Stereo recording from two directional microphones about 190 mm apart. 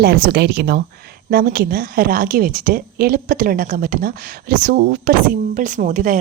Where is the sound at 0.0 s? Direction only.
55° right (ahead or behind).